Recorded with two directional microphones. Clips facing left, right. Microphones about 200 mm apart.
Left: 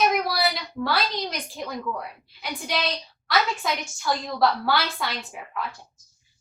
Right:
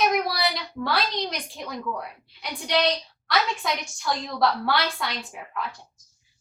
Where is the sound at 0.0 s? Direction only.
Centre (ahead or behind).